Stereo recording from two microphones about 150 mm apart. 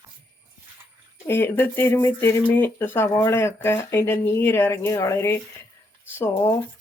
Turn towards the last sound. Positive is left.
turn(degrees=15)  # may be behind; listen again after turning